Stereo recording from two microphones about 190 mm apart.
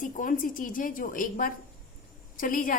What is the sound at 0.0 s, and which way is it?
A woman's voice, 45° left (ahead or behind).